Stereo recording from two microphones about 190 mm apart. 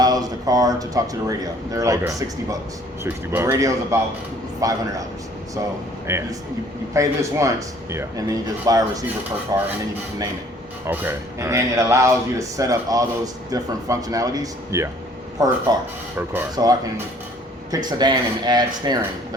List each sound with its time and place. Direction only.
0.0 s speech: 20° right (ahead or behind)
6.1 s speech: 15° right (ahead or behind)
10.8 s speech: 10° right (ahead or behind)